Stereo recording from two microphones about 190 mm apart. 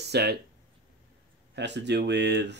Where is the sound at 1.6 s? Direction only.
65° right (ahead or behind).